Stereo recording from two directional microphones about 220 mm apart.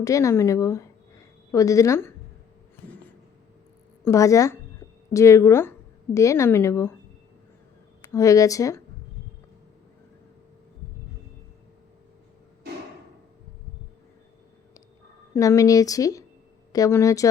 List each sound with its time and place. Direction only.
0.0 s a woman's voice: 15° left (ahead or behind)
2.8 s a sound: 5° left (ahead or behind)
4.0 s a woman's voice: 15° left (ahead or behind)
8.1 s a woman's voice: 15° left (ahead or behind)
15.4 s a woman's voice: 15° left (ahead or behind)